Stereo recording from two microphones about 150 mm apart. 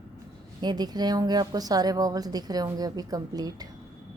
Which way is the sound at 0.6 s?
30° right (ahead or behind).